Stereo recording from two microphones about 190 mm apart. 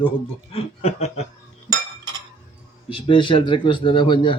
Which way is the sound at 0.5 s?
35° left (ahead or behind).